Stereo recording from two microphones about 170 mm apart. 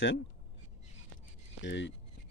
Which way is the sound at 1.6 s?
90° left.